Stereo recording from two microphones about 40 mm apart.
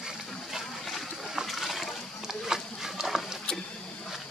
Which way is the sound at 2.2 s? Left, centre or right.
Centre.